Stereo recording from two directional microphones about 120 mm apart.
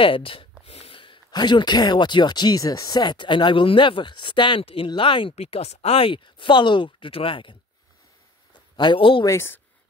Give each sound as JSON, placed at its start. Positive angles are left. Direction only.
{"t": 0.0, "sound": "speech", "side_deg": 50}
{"t": 5.3, "sound": "speech", "side_deg": 60}
{"t": 8.7, "sound": "speech", "side_deg": 40}
{"t": 9.2, "sound": "a woman's voice", "side_deg": 20}